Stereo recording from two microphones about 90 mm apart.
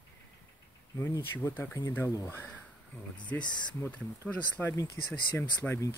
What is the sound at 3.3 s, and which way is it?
Speech, 30° left (ahead or behind).